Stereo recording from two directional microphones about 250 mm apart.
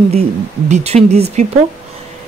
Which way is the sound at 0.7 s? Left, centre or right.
Right.